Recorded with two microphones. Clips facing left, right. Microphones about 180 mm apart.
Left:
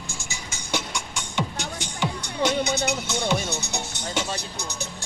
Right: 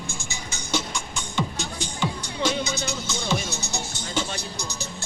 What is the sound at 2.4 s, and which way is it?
Music, 65° left (ahead or behind).